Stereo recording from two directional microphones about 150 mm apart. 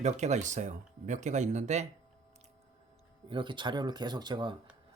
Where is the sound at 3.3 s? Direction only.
30° right (ahead or behind).